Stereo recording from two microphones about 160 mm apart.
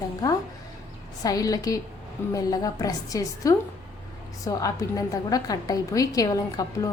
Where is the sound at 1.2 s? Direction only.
20° left (ahead or behind).